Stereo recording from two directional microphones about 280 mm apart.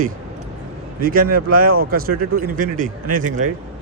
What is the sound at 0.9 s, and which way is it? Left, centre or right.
Speech, right.